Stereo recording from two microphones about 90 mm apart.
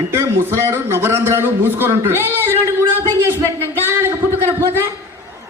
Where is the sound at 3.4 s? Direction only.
25° left (ahead or behind).